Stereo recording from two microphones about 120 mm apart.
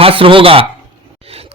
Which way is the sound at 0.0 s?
50° right (ahead or behind).